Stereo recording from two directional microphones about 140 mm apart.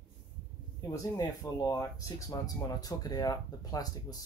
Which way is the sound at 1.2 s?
20° left (ahead or behind).